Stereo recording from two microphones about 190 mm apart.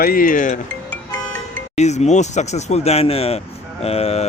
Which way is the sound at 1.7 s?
35° left (ahead or behind).